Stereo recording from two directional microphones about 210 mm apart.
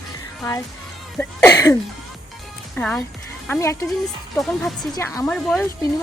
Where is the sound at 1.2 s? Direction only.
10° left (ahead or behind).